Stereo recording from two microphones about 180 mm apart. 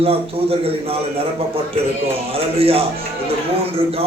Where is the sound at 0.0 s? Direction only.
30° right (ahead or behind).